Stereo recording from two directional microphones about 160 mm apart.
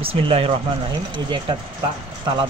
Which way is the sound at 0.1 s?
40° right (ahead or behind).